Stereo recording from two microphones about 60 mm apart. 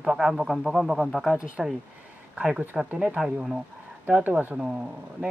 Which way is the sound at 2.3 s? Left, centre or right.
Centre.